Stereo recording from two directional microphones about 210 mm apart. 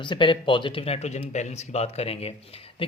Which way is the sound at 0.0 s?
25° left (ahead or behind).